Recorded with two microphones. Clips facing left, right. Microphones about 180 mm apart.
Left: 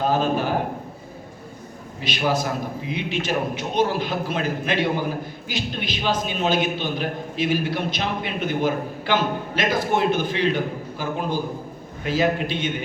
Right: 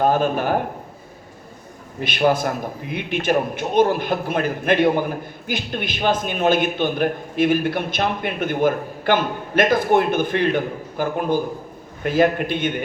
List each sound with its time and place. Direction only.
0.0 s a man's voice: 55° right (ahead or behind)
2.0 s a man's voice: 55° right (ahead or behind)